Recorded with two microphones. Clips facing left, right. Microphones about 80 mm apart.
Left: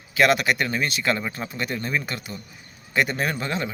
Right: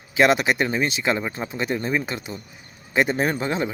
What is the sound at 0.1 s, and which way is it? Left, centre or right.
Speech, right.